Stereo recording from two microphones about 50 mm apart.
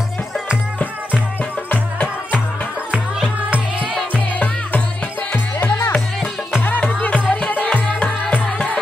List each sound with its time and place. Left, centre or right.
1.7 s music: left
4.1 s music: left
6.8 s music: left